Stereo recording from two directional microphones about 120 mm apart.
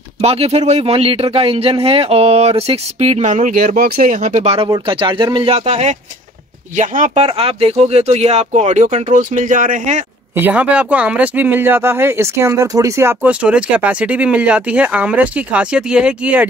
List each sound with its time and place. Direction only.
0.2 s speech: 60° right (ahead or behind); by 3.5 s 90° right
4.1 s speech: 80° right; by 4.6 s 60° right (ahead or behind)
4.8 s speech: 45° right (ahead or behind)
5.7 s speech: 70° right (ahead or behind)
6.8 s speech: 85° right
7.2 s speech: 55° right (ahead or behind); by 10.0 s 90° right
10.3 s speech: 15° right (ahead or behind)